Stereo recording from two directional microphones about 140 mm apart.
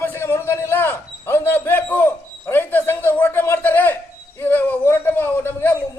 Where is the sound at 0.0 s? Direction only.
15° left (ahead or behind).